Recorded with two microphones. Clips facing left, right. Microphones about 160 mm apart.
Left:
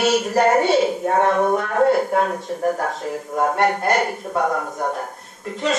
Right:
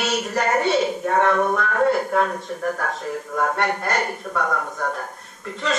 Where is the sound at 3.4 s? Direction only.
25° left (ahead or behind).